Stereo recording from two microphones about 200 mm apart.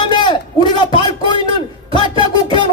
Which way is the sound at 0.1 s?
20° left (ahead or behind).